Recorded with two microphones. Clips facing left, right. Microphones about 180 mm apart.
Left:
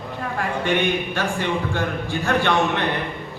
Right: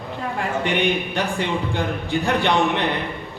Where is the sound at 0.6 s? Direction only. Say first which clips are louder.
Left 1 dB; 15° right (ahead or behind).